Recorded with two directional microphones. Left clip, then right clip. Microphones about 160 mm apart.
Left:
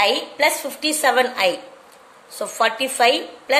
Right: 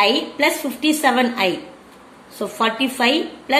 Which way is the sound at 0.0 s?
40° left (ahead or behind).